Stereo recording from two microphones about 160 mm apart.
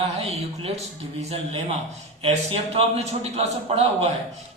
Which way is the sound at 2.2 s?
40° right (ahead or behind).